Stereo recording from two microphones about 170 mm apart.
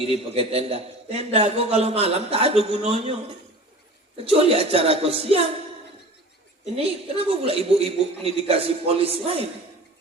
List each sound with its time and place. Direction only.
0.0 s a man's voice: 35° right (ahead or behind)
6.7 s a man's voice: 35° right (ahead or behind)